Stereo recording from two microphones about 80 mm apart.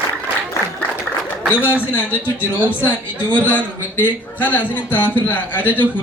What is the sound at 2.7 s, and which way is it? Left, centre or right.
Speech, left.